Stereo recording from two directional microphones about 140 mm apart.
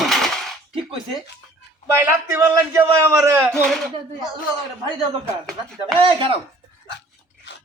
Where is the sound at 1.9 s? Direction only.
20° right (ahead or behind).